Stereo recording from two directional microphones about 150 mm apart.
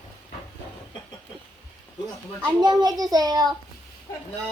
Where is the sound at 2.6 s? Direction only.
25° right (ahead or behind).